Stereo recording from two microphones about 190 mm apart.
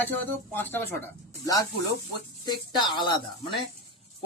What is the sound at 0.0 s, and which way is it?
Speech, 10° left (ahead or behind).